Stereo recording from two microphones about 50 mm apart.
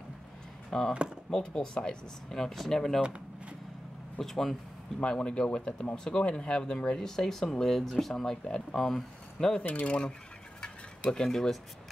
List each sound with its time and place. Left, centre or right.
0.7 s speech: centre
3.0 s a sound: centre
4.2 s speech: centre
5.0 s speech: centre
9.7 s speech: left
10.6 s a sound: centre
11.2 s speech: centre